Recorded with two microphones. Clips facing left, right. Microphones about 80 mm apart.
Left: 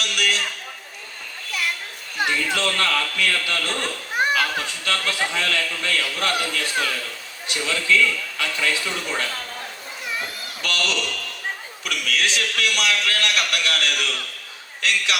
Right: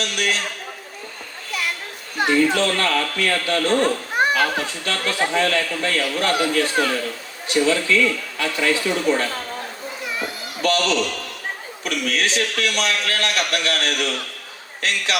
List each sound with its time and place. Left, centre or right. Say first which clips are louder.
0.0 s a man's voice: right 1 dB; right
2.1 s a man's voice: right 6 dB; right
10.6 s a man's voice: right 7 dB; right